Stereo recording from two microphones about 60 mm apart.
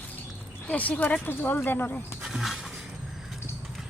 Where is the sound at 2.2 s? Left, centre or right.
Centre.